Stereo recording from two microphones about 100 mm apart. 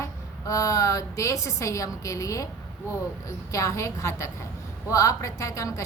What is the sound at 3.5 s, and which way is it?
A woman's voice, 30° left (ahead or behind).